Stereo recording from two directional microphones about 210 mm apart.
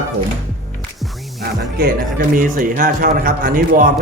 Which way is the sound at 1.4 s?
45° right (ahead or behind).